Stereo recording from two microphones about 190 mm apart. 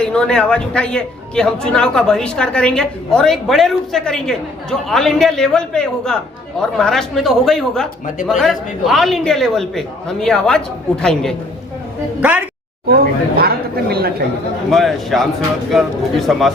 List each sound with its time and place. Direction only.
0.0 s a man's voice: 5° left (ahead or behind)
12.2 s a woman's voice: 5° right (ahead or behind)
12.9 s speech: 55° right (ahead or behind)
14.7 s a man's voice: centre (ahead or behind)